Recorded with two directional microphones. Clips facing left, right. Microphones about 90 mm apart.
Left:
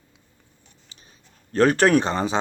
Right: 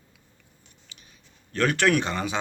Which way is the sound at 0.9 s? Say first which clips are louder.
Even; 30° left (ahead or behind).